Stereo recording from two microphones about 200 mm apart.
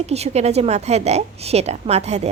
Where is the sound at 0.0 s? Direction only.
30° right (ahead or behind).